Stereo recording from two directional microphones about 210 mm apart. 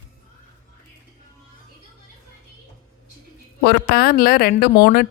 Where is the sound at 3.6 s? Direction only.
45° left (ahead or behind).